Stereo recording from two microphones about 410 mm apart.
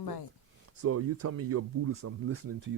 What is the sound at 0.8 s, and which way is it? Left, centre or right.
A man's voice, right.